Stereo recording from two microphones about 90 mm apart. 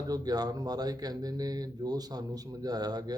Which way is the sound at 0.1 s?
45° right (ahead or behind).